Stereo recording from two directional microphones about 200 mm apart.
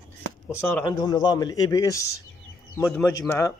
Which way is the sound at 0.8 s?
20° left (ahead or behind).